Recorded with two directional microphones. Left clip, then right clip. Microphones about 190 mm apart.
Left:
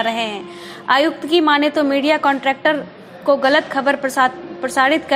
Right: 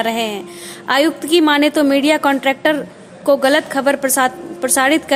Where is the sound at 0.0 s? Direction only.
35° right (ahead or behind).